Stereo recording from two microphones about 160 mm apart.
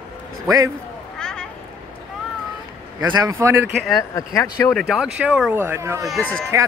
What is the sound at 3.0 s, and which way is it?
Speech, 25° right (ahead or behind).